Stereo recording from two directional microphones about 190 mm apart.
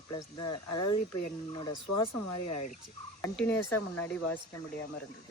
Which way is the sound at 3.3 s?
10° left (ahead or behind).